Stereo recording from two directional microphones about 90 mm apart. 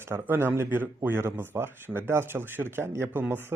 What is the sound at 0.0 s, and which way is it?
Speech, 25° right (ahead or behind).